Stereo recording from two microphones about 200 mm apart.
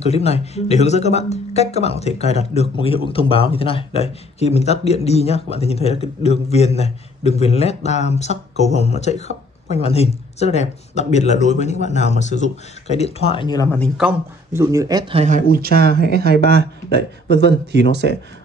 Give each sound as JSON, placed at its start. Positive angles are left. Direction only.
{"t": 0.0, "sound": "speech", "side_deg": 30}
{"t": 13.9, "sound": "speech", "side_deg": -10}
{"t": 15.5, "sound": "speech", "side_deg": -50}